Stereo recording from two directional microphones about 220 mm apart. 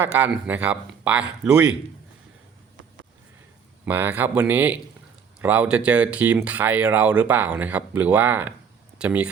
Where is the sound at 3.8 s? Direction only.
10° right (ahead or behind).